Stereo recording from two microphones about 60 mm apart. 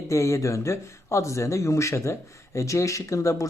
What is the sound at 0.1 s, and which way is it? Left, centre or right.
Speech, left.